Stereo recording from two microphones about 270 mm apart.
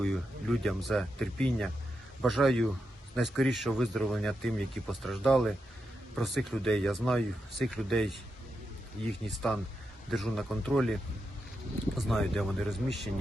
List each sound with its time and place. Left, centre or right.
0.0 s speech: centre
9.3 s speech: centre
11.9 s speech: centre